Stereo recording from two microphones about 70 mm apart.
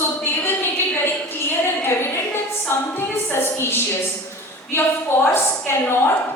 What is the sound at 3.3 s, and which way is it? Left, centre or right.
Speech, left.